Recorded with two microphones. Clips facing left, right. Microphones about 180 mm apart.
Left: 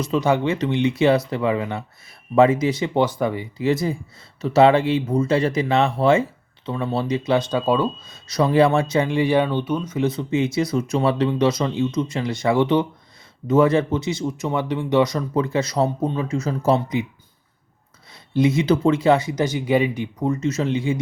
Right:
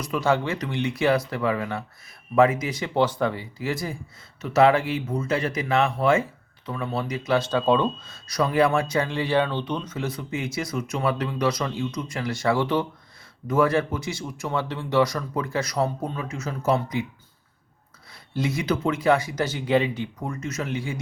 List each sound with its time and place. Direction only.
0.0 s speech: 20° left (ahead or behind)
3.6 s speech: 25° left (ahead or behind); by 8.1 s 10° left (ahead or behind)
8.1 s speech: 25° left (ahead or behind)
9.0 s speech: 15° left (ahead or behind)
10.0 s speech: 25° left (ahead or behind)
18.1 s speech: 20° left (ahead or behind)